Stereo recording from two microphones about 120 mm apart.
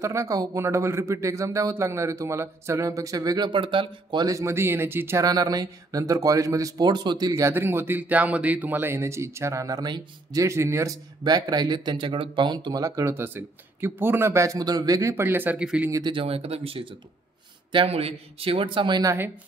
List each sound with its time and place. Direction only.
0.0 s speech: 25° right (ahead or behind)
5.2 s speech: 30° right (ahead or behind); by 15.9 s 10° right (ahead or behind)
15.9 s speech: 40° right (ahead or behind)
19.0 s speech: 20° right (ahead or behind)